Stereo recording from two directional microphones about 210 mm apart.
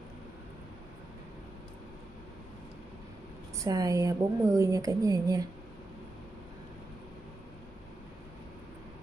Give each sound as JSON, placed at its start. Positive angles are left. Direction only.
{"t": 3.6, "sound": "speech", "side_deg": -15}